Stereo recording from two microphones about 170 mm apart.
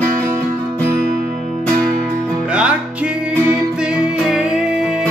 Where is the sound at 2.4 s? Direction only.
5° right (ahead or behind).